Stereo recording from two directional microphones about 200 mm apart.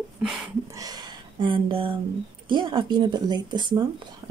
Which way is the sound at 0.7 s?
20° right (ahead or behind).